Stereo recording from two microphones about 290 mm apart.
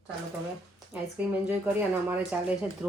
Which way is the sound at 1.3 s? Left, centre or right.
Centre.